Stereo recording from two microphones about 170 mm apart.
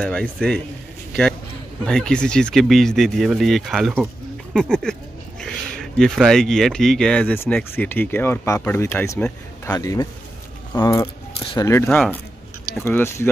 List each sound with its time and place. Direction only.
0.0 s speech: 10° left (ahead or behind)
1.9 s speech: 5° left (ahead or behind)